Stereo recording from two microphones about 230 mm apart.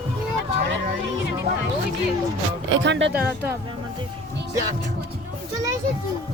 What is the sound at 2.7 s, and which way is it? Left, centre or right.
Speech, right.